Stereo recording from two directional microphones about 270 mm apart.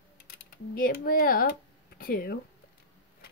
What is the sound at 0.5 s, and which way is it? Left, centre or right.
Speech, left.